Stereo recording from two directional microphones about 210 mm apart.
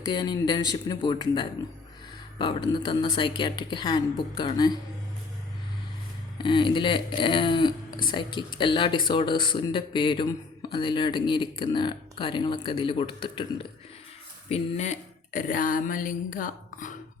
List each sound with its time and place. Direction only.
0.0 s speech: 20° left (ahead or behind)
6.4 s speech: 20° left (ahead or behind); by 16.9 s 40° left (ahead or behind)